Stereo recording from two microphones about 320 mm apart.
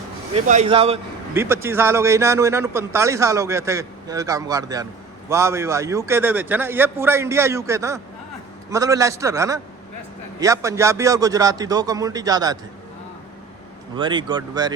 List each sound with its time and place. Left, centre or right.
0.3 s speech: right
1.3 s a man's voice: centre
13.9 s a man's voice: centre